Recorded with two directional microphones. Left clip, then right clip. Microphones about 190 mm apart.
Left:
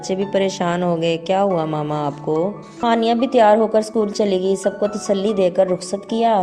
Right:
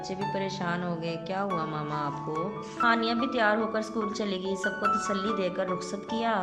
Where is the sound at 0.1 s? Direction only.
40° left (ahead or behind).